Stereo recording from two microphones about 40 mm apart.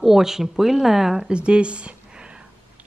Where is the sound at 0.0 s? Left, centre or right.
Centre.